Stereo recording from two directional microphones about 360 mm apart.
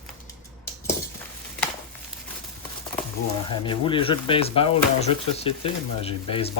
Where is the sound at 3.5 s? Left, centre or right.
Centre.